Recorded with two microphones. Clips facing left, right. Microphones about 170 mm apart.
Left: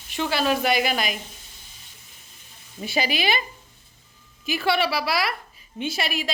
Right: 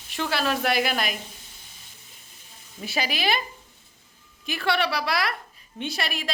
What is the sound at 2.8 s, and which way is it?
Speech, centre (ahead or behind).